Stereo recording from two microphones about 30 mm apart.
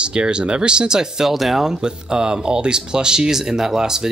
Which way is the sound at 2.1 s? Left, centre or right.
Right.